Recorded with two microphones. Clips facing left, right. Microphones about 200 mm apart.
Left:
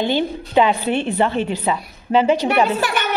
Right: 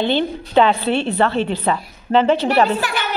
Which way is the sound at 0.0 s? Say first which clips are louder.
Right 1 dB; 15° left (ahead or behind).